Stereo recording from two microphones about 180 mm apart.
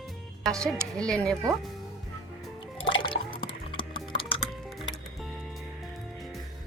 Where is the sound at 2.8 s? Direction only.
30° left (ahead or behind).